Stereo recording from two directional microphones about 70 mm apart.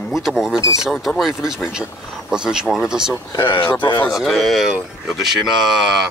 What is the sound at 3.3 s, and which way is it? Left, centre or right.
Speech, left.